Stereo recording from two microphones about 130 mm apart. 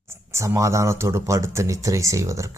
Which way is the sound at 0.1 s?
20° right (ahead or behind).